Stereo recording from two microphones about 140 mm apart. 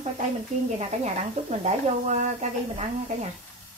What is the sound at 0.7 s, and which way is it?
Speech, 50° right (ahead or behind).